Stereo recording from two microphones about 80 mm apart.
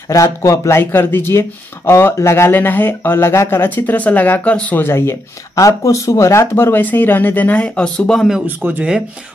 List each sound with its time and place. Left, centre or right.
0.1 s speech: left
5.6 s speech: left
6.4 s speech: left; by 8.3 s centre
8.5 s speech: right